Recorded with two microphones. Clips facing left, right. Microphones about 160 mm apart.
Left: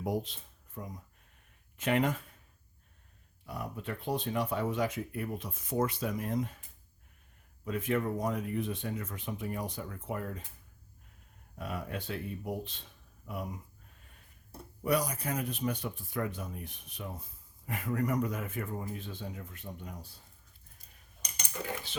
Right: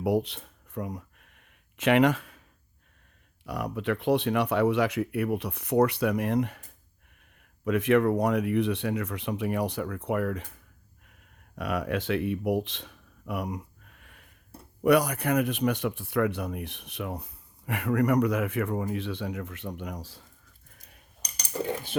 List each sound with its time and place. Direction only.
0.0 s a sound: 70° right (ahead or behind)
3.4 s speech: 90° right; by 6.6 s 70° right (ahead or behind)
7.6 s speech: 80° right
11.5 s speech: 80° right
14.8 s speech: 70° right (ahead or behind); by 20.2 s 90° right
21.2 s cutlery: 35° right (ahead or behind)